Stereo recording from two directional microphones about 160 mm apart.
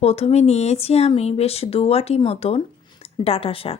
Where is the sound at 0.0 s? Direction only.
40° left (ahead or behind).